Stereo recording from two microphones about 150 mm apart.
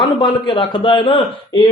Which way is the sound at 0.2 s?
30° left (ahead or behind).